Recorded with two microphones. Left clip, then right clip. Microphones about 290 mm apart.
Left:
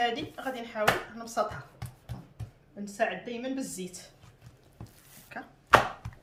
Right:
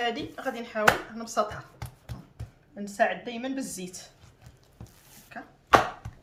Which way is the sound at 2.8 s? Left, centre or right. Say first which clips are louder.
Right 4 dB; centre.